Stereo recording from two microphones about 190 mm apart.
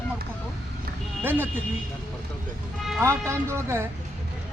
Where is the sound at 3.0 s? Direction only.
15° right (ahead or behind).